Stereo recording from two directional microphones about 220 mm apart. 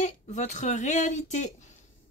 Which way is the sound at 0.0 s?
35° left (ahead or behind).